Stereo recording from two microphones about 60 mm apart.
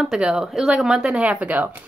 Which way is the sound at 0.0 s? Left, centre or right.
Centre.